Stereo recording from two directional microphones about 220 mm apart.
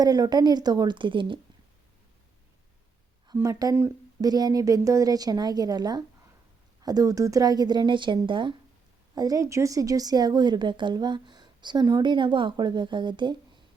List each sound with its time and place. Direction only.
0.0 s speech: 15° right (ahead or behind)
3.2 s speech: 15° right (ahead or behind)